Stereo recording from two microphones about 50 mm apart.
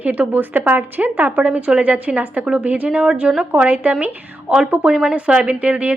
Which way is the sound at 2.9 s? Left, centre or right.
Centre.